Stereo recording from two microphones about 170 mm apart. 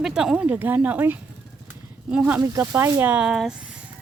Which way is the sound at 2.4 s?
20° right (ahead or behind).